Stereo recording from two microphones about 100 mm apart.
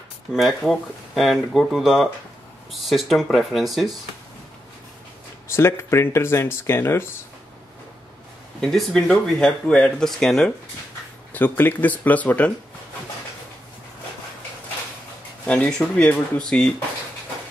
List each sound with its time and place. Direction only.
0.3 s speech: centre (ahead or behind)
5.5 s speech: 25° left (ahead or behind)
8.5 s speech: 5° left (ahead or behind)
11.3 s speech: 20° left (ahead or behind)
15.4 s speech: 10° left (ahead or behind)